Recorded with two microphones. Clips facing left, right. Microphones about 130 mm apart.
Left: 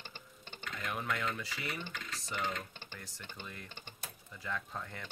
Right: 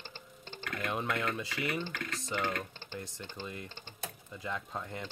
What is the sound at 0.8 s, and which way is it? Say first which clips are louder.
Speech: right 3 dB; 20° right (ahead or behind).